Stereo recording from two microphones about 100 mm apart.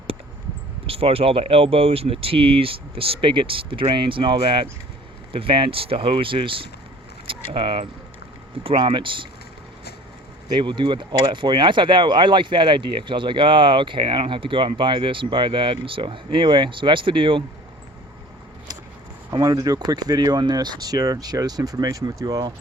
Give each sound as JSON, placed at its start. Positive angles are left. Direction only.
{"t": 0.9, "sound": "speech", "side_deg": -75}
{"t": 10.5, "sound": "speech", "side_deg": -55}
{"t": 19.3, "sound": "speech", "side_deg": -40}